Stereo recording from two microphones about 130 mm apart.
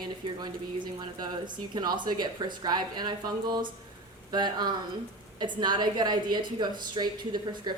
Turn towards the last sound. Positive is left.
turn(degrees=-35)  # may be behind; listen again after turning